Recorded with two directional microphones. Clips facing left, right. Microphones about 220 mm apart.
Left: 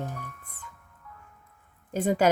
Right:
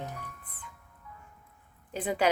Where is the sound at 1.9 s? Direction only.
45° left (ahead or behind).